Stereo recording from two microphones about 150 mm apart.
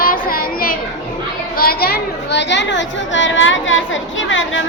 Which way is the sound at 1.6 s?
90° left.